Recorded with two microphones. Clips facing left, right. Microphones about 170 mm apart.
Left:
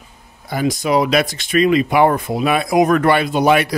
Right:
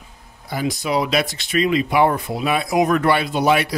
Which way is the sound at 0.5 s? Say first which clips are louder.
Left 5 dB; 50° left (ahead or behind).